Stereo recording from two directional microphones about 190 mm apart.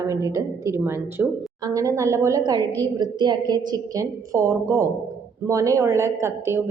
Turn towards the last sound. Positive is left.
turn(degrees=-15)  # may be behind; listen again after turning